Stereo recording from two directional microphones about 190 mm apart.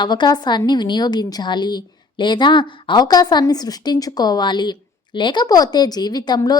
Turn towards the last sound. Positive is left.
turn(degrees=20)  # may be behind; listen again after turning